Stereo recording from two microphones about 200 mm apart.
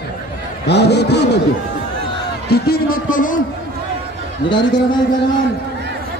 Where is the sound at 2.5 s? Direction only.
50° left (ahead or behind).